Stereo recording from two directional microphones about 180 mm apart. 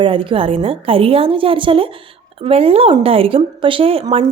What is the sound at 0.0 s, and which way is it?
A woman's voice, 30° right (ahead or behind).